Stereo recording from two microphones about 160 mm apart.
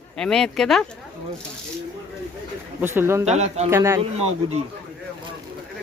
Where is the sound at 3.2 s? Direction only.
45° right (ahead or behind).